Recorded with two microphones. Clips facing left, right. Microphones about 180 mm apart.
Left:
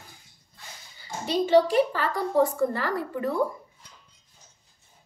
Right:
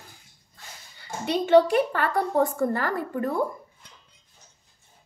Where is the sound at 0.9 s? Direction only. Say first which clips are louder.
Even; 60° right (ahead or behind).